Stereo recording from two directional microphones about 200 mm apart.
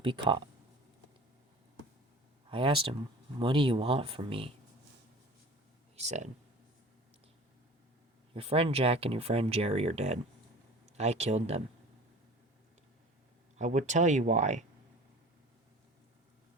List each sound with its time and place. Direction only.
0.0 s speech: 25° right (ahead or behind)
2.5 s speech: 25° right (ahead or behind)
6.0 s speech: 35° right (ahead or behind)
8.3 s speech: 30° right (ahead or behind)
13.6 s speech: 35° right (ahead or behind)